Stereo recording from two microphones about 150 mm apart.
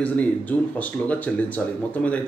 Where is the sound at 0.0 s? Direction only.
10° left (ahead or behind).